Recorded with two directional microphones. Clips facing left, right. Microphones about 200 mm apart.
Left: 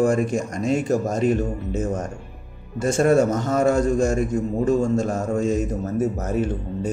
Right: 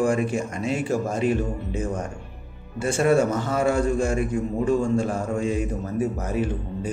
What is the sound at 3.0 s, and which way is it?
A man's voice, 40° left (ahead or behind).